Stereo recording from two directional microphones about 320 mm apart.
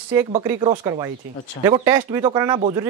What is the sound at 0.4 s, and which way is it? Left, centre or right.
Speech, centre.